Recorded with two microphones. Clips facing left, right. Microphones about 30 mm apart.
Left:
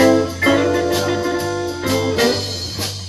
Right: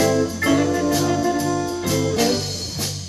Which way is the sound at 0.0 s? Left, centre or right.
Left.